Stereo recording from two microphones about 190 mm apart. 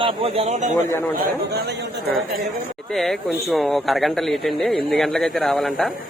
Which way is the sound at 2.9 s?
Centre (ahead or behind).